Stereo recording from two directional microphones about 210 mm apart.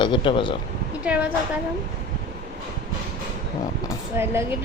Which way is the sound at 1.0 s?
5° right (ahead or behind).